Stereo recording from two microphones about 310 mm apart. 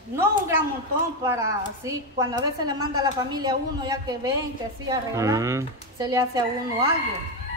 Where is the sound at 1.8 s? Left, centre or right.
Centre.